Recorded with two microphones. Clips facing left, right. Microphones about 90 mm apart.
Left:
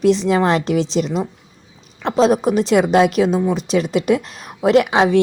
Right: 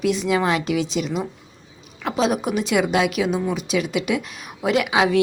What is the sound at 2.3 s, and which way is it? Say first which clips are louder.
A woman's voice: left 6 dB; 35° left (ahead or behind).